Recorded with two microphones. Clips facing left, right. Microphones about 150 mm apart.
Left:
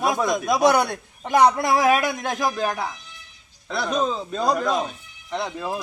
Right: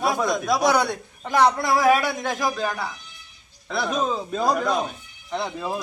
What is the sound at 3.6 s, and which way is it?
Speech, centre (ahead or behind).